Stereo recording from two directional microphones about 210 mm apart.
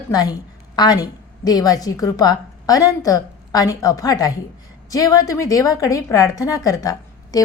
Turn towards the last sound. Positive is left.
turn(degrees=15)  # may be behind; listen again after turning